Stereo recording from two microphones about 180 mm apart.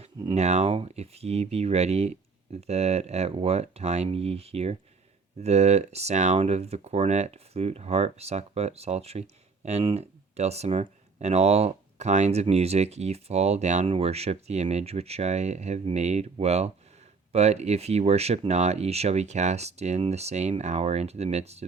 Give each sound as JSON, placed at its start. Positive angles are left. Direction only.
{"t": 0.0, "sound": "speech", "side_deg": -35}